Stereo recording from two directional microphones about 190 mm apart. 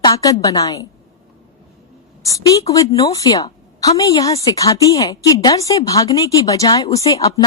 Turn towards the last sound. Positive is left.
turn(degrees=20)  # may be behind; listen again after turning